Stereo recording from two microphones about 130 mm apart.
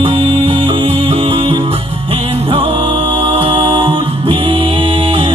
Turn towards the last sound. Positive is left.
turn(degrees=-40)  # may be behind; listen again after turning